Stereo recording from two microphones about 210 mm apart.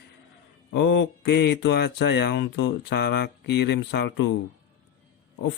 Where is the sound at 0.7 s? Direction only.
55° left (ahead or behind).